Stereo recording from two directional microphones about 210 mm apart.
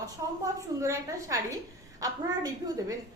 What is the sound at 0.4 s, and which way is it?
A woman's voice, 15° right (ahead or behind).